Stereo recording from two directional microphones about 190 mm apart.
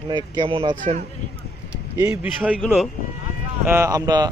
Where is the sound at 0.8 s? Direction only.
40° right (ahead or behind).